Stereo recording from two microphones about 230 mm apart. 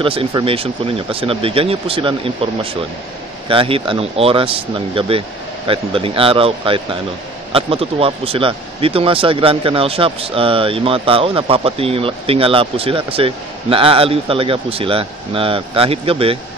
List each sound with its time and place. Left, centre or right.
0.0 s speech: right